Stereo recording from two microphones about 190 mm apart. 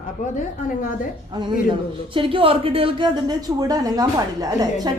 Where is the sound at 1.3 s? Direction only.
25° right (ahead or behind).